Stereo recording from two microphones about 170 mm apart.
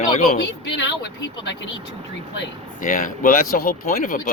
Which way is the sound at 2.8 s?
50° left (ahead or behind).